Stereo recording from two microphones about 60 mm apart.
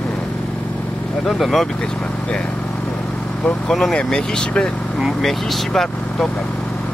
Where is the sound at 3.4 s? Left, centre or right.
Centre.